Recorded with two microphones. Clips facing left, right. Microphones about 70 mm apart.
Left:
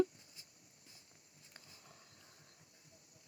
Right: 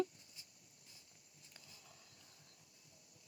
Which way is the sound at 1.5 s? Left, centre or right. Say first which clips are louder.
Left 2 dB; left.